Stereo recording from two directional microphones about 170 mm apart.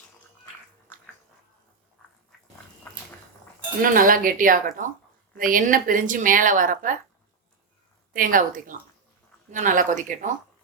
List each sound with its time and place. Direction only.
3.8 s a woman's voice: 55° right (ahead or behind)
8.1 s a woman's voice: 55° right (ahead or behind)